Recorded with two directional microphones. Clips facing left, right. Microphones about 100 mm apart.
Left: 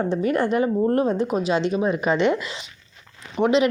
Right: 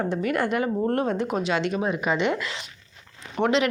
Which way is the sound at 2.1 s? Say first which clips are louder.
Left 5 dB; 15° right (ahead or behind).